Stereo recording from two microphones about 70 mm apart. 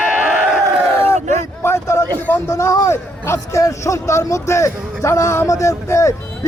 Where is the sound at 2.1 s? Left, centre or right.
Left.